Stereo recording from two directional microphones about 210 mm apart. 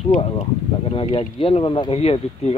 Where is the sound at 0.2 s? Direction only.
25° left (ahead or behind).